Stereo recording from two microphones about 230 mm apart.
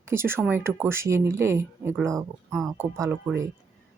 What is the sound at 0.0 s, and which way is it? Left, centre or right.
Speech, centre.